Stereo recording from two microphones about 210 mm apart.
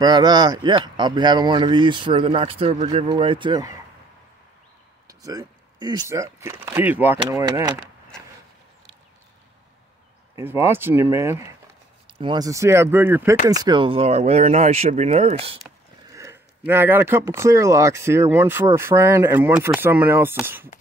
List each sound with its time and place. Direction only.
0.0 s speech: 20° right (ahead or behind)
5.0 s speech: 15° right (ahead or behind)
10.3 s speech: 10° right (ahead or behind)
13.5 s speech: 20° right (ahead or behind)
16.1 s speech: 15° right (ahead or behind)